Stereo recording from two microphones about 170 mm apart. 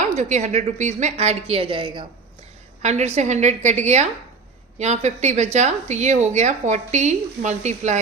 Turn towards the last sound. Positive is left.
turn(degrees=-45)  # may be behind; listen again after turning